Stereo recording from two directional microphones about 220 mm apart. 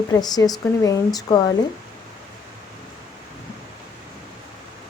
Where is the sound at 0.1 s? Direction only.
15° left (ahead or behind).